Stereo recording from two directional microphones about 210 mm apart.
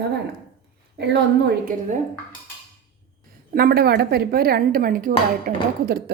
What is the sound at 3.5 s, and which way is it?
Speech, 45° right (ahead or behind).